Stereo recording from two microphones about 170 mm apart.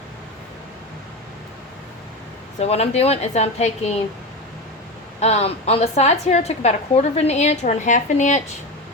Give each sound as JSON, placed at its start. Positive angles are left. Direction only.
{"t": 2.6, "sound": "a woman's voice", "side_deg": 40}
{"t": 5.2, "sound": "a woman's voice", "side_deg": 40}